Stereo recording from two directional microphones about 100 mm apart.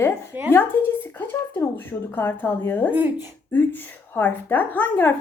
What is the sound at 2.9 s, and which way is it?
Speech, 15° right (ahead or behind).